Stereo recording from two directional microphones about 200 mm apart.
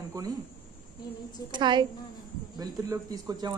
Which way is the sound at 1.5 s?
25° right (ahead or behind).